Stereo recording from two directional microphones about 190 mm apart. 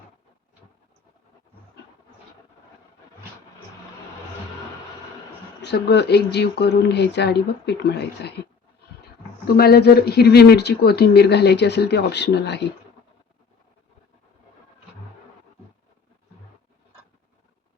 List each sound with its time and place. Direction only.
5.6 s speech: 60° left (ahead or behind)
9.5 s speech: 55° left (ahead or behind)